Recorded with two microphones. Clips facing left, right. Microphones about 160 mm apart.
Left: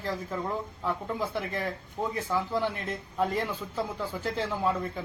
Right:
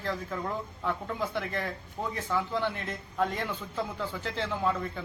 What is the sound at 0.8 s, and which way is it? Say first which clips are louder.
Speech: even; 5° left (ahead or behind).